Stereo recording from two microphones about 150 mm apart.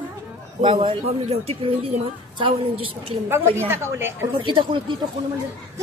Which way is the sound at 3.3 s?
15° right (ahead or behind).